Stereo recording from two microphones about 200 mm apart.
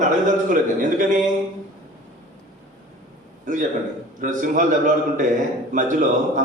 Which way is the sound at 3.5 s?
40° right (ahead or behind).